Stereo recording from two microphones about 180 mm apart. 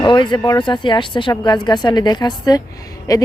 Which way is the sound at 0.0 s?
25° left (ahead or behind).